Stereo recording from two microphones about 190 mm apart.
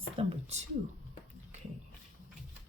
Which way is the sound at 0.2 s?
35° right (ahead or behind).